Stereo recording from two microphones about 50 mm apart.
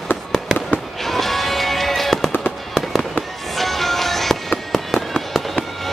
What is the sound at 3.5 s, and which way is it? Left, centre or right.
Music, centre.